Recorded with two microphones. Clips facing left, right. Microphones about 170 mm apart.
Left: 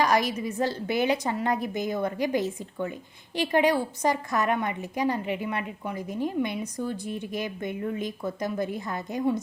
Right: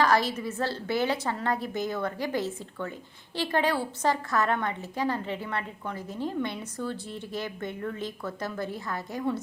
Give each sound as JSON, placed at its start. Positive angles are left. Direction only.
{"t": 0.0, "sound": "a woman's voice", "side_deg": 15}